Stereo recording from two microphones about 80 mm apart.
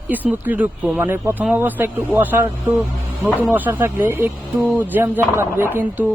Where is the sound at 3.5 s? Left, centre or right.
Right.